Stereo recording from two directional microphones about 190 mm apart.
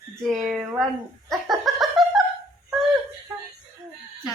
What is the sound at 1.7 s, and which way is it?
Laughter, centre (ahead or behind).